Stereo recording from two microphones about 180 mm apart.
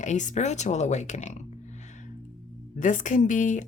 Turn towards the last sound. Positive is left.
turn(degrees=45)  # may be behind; listen again after turning